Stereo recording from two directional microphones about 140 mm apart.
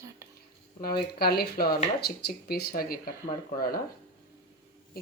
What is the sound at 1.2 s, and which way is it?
Speech, 90° left.